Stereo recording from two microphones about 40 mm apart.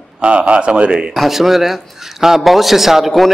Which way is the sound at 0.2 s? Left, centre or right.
Right.